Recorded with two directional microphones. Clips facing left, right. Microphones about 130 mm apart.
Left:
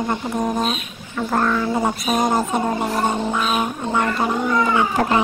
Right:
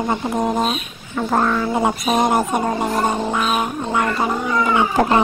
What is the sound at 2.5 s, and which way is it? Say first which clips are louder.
Music: right 1 dB; 5° right (ahead or behind).